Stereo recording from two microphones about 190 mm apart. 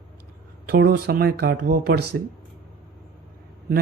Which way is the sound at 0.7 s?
55° right (ahead or behind).